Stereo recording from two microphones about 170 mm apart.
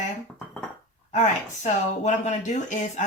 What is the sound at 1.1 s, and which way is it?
Speech, 45° left (ahead or behind).